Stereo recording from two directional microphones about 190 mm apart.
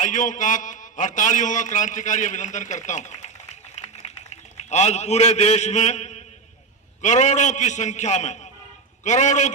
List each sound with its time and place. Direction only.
0.0 s a man's voice: 40° left (ahead or behind)